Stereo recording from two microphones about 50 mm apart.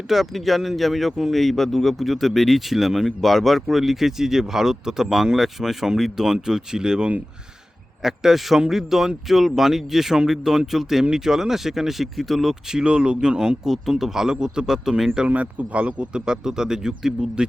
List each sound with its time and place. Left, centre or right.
0.1 s speech: centre
15.3 s speech: right; by 17.4 s centre